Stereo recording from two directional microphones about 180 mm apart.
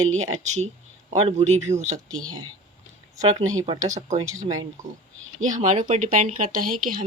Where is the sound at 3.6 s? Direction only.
40° right (ahead or behind).